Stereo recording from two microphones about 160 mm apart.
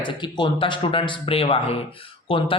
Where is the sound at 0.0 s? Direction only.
30° left (ahead or behind).